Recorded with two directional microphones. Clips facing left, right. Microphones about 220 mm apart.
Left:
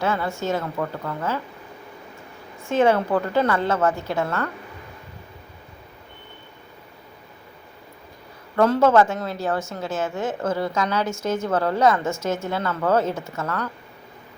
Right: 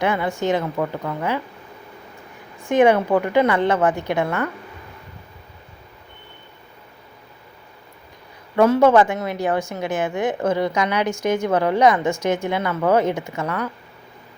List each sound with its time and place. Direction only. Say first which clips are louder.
0.0 s speech: right 3 dB; 15° right (ahead or behind)
2.6 s speech: right 3 dB; 15° right (ahead or behind)
8.5 s speech: right 3 dB; 10° right (ahead or behind)